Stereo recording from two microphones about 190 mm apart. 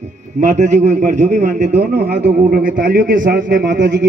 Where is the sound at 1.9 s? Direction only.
55° right (ahead or behind).